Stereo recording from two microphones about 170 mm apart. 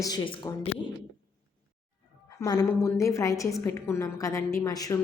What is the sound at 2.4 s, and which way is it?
A woman's voice, 15° left (ahead or behind).